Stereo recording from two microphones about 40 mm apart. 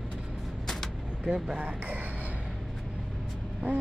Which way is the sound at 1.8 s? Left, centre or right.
Right.